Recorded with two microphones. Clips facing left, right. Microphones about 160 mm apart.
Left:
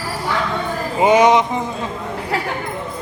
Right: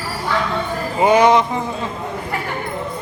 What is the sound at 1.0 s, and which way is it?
Speech, 20° left (ahead or behind).